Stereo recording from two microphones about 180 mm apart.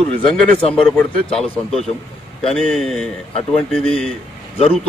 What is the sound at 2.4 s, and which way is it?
Speech, 5° left (ahead or behind).